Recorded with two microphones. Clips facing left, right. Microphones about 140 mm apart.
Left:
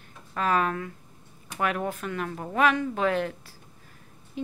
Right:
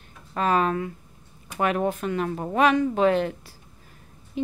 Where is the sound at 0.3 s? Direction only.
25° right (ahead or behind).